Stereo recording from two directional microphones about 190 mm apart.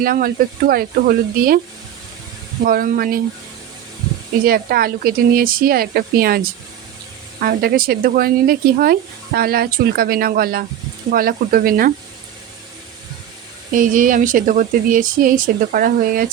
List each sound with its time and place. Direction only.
0.0 s speech: 50° right (ahead or behind)
2.6 s speech: 50° right (ahead or behind)
4.4 s speech: 50° right (ahead or behind)
13.7 s speech: 45° right (ahead or behind)